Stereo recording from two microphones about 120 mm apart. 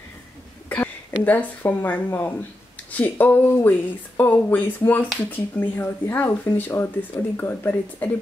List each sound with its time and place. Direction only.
0.7 s speech: 15° left (ahead or behind)